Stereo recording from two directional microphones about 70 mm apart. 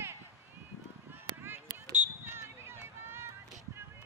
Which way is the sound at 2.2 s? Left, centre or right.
Right.